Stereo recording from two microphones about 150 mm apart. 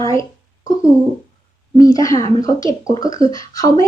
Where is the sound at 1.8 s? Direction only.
20° left (ahead or behind).